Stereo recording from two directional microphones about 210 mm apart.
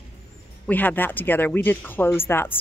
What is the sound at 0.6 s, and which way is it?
A woman's voice, 10° left (ahead or behind).